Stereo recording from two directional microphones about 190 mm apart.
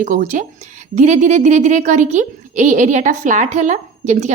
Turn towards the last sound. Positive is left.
turn(degrees=-40)  # may be behind; listen again after turning